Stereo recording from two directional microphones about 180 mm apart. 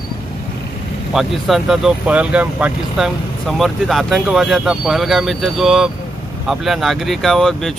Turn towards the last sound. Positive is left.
turn(degrees=0)  # may be behind; listen again after turning